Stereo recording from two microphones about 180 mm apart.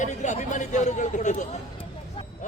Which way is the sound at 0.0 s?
40° left (ahead or behind).